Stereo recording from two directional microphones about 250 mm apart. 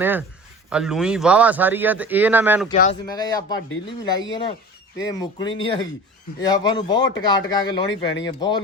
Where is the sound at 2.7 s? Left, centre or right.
Left.